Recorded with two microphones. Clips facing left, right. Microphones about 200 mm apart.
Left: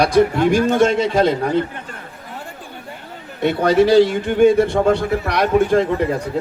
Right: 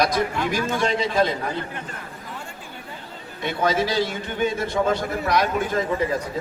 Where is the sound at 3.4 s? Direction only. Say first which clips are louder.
Left 8 dB; 65° left (ahead or behind).